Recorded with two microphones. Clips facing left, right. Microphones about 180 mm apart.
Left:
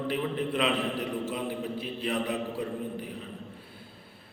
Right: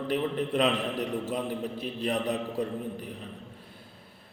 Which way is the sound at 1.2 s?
40° right (ahead or behind).